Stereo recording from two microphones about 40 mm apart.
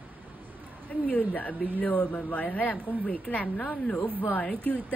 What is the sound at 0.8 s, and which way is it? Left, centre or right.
Speech, left.